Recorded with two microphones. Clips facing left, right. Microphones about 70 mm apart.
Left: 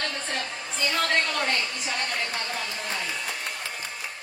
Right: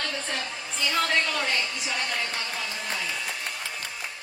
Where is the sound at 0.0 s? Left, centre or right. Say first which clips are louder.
Left 1 dB; left.